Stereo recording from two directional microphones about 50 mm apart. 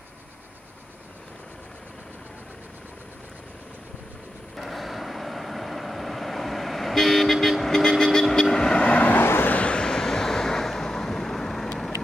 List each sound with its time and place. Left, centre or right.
4.6 s vehicle: centre
8.7 s vehicle: left
9.2 s vehicle: left
9.5 s vehicle: left; by 11.7 s centre